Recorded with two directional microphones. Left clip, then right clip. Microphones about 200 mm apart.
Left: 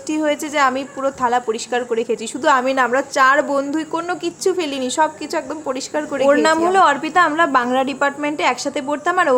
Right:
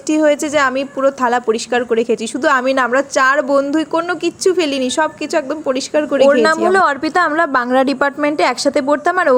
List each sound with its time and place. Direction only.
0.1 s a woman's voice: 20° right (ahead or behind)